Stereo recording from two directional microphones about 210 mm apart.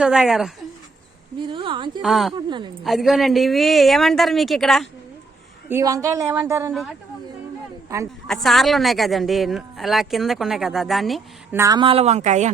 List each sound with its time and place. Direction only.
0.0 s speech: centre (ahead or behind)
1.4 s speech: 25° right (ahead or behind)
2.0 s speech: centre (ahead or behind)
2.5 s speech: 20° right (ahead or behind)
2.8 s speech: centre (ahead or behind)
5.6 s a woman's voice: 15° right (ahead or behind)
8.3 s speech: centre (ahead or behind)
11.5 s speech: 15° right (ahead or behind); by 12.5 s 35° right (ahead or behind)